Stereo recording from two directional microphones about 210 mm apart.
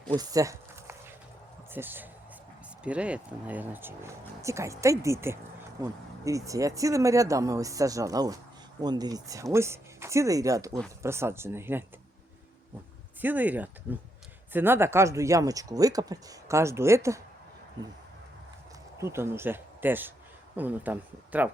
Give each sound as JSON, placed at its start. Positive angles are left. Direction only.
{"t": 0.2, "sound": "a sound", "side_deg": -15}
{"t": 1.7, "sound": "speech", "side_deg": -10}
{"t": 13.2, "sound": "speech", "side_deg": -10}
{"t": 18.9, "sound": "speech", "side_deg": -10}